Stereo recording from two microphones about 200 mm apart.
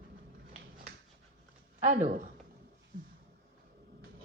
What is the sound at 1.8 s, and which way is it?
Speech, 40° right (ahead or behind).